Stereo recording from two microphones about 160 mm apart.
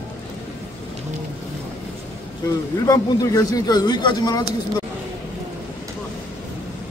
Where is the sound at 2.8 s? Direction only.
20° left (ahead or behind).